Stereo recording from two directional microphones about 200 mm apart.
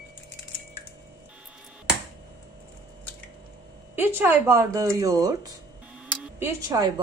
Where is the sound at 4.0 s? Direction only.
10° right (ahead or behind).